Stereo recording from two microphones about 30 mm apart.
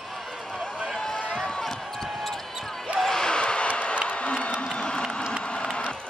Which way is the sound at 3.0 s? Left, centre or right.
Centre.